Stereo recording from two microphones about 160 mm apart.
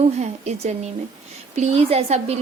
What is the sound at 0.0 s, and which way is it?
A woman's voice, 45° right (ahead or behind).